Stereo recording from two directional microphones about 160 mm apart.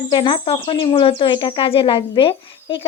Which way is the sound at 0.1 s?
30° left (ahead or behind).